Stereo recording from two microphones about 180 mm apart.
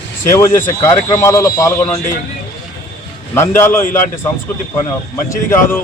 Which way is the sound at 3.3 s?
15° left (ahead or behind).